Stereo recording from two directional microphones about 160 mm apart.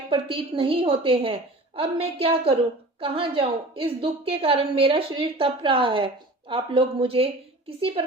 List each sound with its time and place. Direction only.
0.1 s a woman's voice: 35° right (ahead or behind)